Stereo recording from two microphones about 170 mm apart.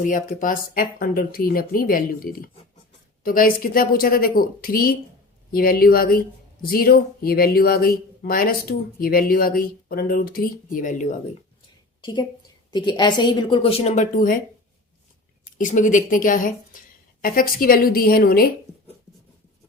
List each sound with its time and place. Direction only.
0.0 s speech: 50° left (ahead or behind)
12.7 s a woman's voice: 25° left (ahead or behind); by 14.4 s 50° left (ahead or behind)
15.5 s a woman's voice: 50° left (ahead or behind)